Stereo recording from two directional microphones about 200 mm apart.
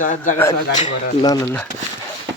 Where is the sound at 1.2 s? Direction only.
20° left (ahead or behind).